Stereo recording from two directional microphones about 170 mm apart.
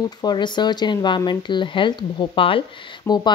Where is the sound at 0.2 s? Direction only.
25° left (ahead or behind).